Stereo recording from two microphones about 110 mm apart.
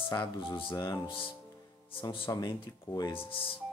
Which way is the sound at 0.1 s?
45° left (ahead or behind).